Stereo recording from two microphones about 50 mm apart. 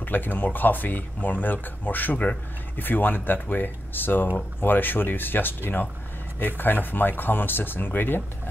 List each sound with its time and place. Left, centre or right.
0.0 s speech: left